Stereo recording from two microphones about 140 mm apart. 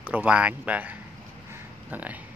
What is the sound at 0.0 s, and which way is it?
Speech, 10° right (ahead or behind).